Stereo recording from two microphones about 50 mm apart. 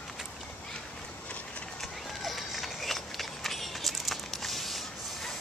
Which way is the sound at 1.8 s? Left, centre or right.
Centre.